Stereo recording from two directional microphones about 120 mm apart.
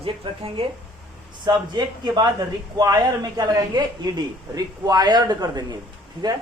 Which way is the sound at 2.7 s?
30° right (ahead or behind).